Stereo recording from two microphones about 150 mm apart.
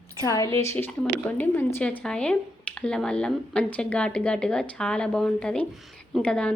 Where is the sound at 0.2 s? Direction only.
20° left (ahead or behind).